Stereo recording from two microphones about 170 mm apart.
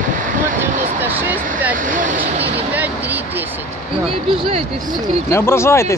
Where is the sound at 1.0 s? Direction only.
10° right (ahead or behind).